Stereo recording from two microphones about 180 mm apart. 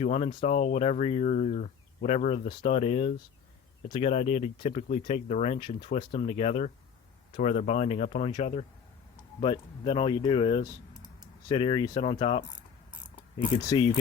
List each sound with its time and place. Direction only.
0.0 s speech: 35° left (ahead or behind)
2.5 s speech: 30° left (ahead or behind)
13.7 s speech: 25° left (ahead or behind)